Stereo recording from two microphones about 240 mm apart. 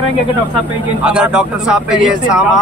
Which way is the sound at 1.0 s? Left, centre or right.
Centre.